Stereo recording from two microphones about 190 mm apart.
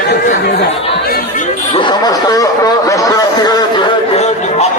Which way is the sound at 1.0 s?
50° left (ahead or behind).